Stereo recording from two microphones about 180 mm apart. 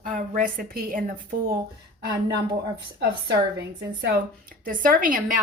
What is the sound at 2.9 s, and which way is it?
A woman's voice, 70° right (ahead or behind).